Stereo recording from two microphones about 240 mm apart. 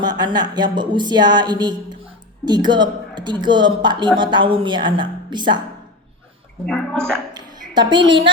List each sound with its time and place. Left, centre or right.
0.0 s a woman's voice: centre
6.7 s speech: centre
7.3 s a woman's voice: centre